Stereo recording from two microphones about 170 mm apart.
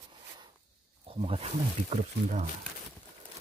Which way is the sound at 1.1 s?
35° right (ahead or behind).